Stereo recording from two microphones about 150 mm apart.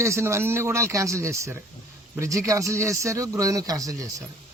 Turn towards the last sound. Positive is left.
turn(degrees=-25)  # may be behind; listen again after turning